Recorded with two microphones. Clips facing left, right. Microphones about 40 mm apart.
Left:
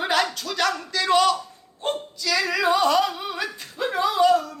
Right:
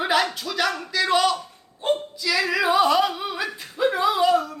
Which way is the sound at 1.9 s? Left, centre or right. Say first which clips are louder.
Right 2 dB; centre.